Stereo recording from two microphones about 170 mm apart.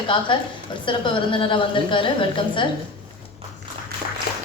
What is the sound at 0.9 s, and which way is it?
A woman's voice, 30° left (ahead or behind).